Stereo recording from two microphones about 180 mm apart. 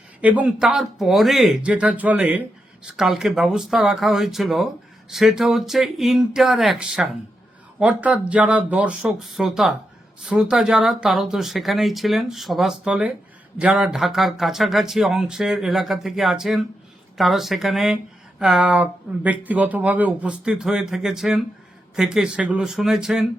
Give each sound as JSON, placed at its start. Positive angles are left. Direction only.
{"t": 0.2, "sound": "speech", "side_deg": -10}